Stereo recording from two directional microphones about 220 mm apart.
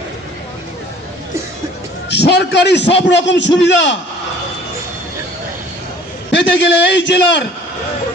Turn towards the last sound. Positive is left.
turn(degrees=55)  # may be behind; listen again after turning